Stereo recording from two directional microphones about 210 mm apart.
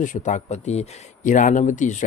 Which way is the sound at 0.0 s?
35° left (ahead or behind).